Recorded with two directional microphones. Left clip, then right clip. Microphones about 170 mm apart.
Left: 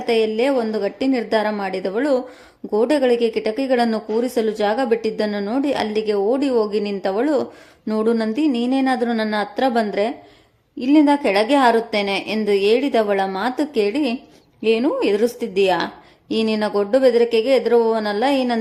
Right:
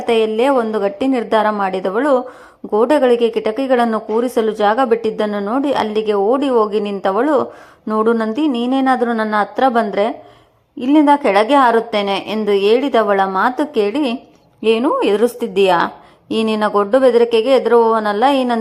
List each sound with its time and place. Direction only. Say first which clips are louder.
0.0 s speech: right 4 dB; 5° right (ahead or behind)